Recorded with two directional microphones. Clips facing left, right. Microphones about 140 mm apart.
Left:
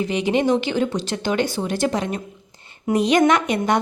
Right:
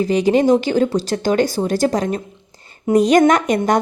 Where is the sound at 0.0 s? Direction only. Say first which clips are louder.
Right 5 dB; 40° right (ahead or behind).